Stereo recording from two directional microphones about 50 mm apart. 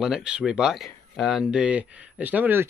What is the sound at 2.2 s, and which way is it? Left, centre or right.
Speech, right.